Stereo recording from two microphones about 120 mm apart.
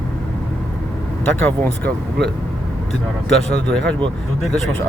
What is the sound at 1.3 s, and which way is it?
Speech, 15° left (ahead or behind).